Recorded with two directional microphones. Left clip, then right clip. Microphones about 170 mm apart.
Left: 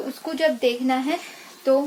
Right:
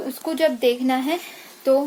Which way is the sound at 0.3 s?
45° right (ahead or behind).